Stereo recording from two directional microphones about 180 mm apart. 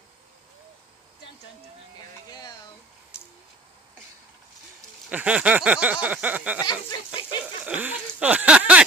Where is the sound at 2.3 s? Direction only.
20° left (ahead or behind).